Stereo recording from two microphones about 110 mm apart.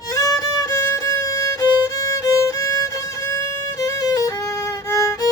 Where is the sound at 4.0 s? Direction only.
30° left (ahead or behind).